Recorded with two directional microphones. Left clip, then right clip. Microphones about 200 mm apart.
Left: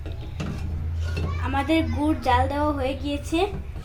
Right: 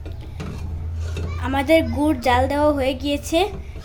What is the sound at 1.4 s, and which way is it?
A woman's voice, 45° right (ahead or behind).